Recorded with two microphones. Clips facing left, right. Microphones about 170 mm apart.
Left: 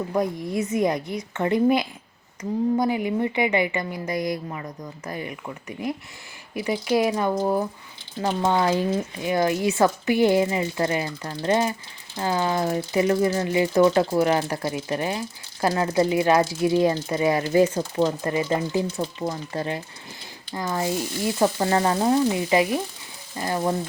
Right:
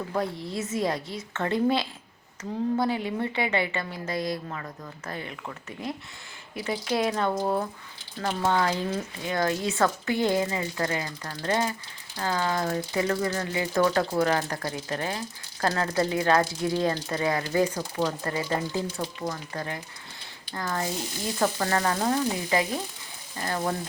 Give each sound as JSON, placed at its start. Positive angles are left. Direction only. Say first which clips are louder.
{"t": 0.4, "sound": "a woman's voice", "louder": "left 5 dB", "side_deg": 15}
{"t": 8.2, "sound": "a woman's voice", "louder": "left 3 dB", "side_deg": 15}